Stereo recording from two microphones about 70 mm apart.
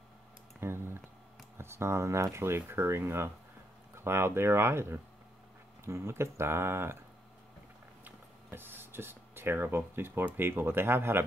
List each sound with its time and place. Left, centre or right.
0.6 s a sound: right
1.6 s speech: right
8.0 s speech: right